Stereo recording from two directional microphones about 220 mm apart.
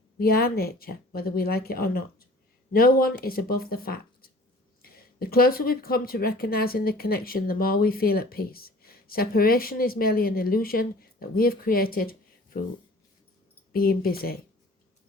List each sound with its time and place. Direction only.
0.2 s speech: 45° left (ahead or behind)
13.7 s speech: 45° left (ahead or behind)